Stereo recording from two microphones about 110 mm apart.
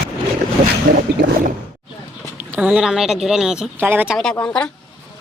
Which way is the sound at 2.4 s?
15° right (ahead or behind).